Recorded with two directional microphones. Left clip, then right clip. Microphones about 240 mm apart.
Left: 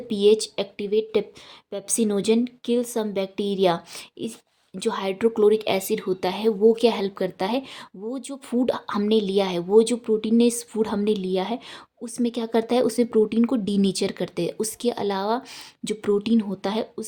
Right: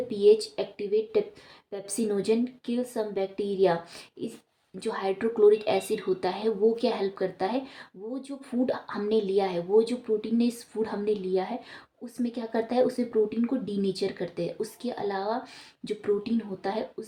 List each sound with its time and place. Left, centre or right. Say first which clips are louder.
0.1 s a woman's voice: left 3 dB; left